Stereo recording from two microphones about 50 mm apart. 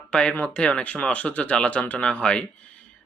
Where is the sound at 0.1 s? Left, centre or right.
Left.